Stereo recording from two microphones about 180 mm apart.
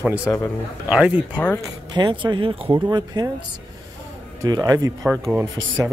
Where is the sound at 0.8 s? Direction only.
5° right (ahead or behind).